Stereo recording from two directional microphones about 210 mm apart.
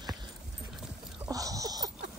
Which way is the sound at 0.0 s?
20° right (ahead or behind).